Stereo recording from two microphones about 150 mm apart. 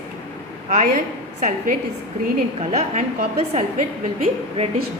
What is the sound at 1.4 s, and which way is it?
A woman's voice, 55° right (ahead or behind).